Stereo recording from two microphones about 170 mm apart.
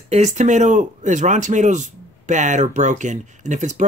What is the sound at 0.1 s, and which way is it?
Speech, 45° right (ahead or behind).